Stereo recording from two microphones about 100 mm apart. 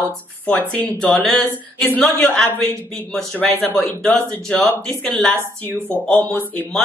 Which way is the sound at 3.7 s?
5° left (ahead or behind).